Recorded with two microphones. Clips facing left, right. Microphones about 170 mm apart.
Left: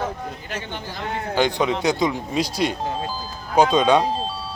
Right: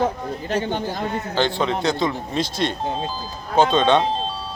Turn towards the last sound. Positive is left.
turn(degrees=10)  # may be behind; listen again after turning